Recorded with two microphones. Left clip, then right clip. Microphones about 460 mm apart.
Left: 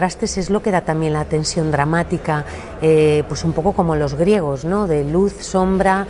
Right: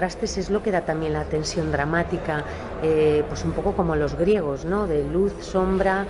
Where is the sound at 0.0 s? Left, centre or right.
Left.